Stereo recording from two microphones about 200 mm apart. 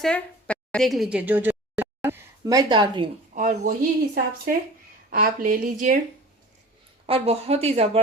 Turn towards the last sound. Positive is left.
turn(degrees=-30)  # may be behind; listen again after turning